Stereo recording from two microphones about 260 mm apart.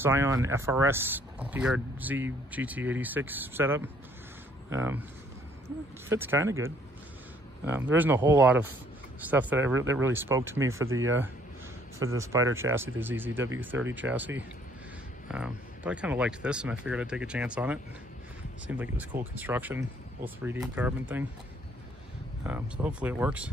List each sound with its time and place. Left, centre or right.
0.0 s speech: centre
6.0 s speech: centre
7.9 s speech: centre
10.8 s speech: right
12.2 s speech: centre
22.4 s speech: centre